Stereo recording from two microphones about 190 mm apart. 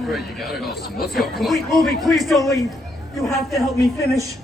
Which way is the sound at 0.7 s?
55° left (ahead or behind).